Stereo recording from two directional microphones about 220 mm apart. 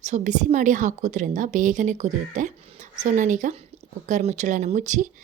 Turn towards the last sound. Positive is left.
turn(degrees=-35)  # may be behind; listen again after turning